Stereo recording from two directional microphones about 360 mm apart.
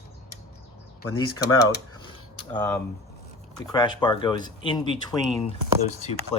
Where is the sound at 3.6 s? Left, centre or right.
Centre.